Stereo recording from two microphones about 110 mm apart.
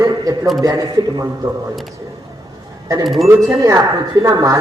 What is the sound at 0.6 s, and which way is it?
Speech, 30° right (ahead or behind).